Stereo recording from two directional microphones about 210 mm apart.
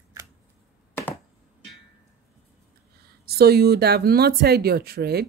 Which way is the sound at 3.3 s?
50° right (ahead or behind).